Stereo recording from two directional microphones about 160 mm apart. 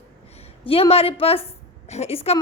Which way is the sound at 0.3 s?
40° left (ahead or behind).